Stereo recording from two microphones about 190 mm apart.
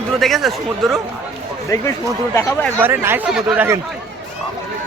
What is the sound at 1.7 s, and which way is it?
Speech, 15° left (ahead or behind).